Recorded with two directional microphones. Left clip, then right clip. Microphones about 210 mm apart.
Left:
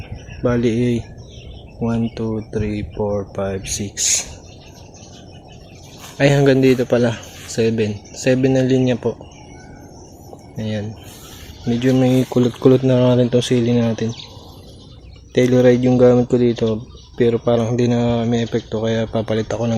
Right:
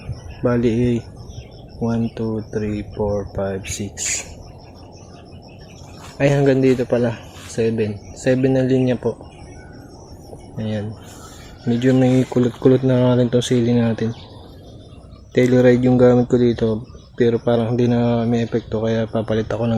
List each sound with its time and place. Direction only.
0.4 s speech: 5° left (ahead or behind)
6.1 s speech: 20° left (ahead or behind)
10.6 s speech: 5° left (ahead or behind)
15.3 s speech: centre (ahead or behind)